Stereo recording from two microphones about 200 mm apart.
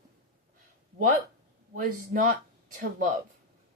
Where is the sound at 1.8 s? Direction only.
45° right (ahead or behind).